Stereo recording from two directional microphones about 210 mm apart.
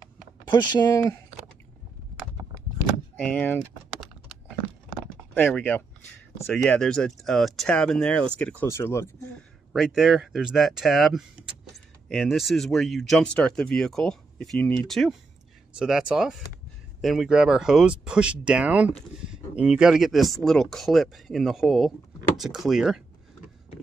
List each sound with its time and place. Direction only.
0.5 s speech: 20° left (ahead or behind)
3.2 s speech: 10° left (ahead or behind)
5.3 s speech: 10° left (ahead or behind)
9.7 s speech: 5° right (ahead or behind)